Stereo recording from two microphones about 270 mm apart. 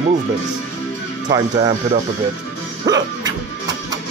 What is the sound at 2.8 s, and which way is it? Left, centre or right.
Music, centre.